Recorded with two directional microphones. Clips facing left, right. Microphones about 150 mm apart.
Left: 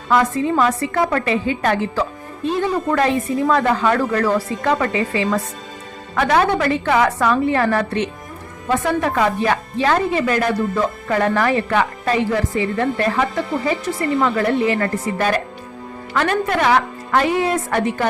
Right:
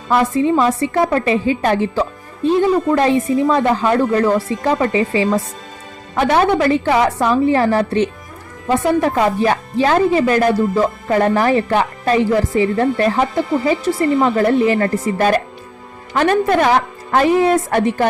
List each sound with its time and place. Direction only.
0.1 s a woman's voice: 25° right (ahead or behind)
14.3 s speech: 40° right (ahead or behind)